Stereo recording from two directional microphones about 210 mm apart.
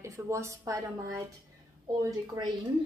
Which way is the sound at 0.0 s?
15° right (ahead or behind).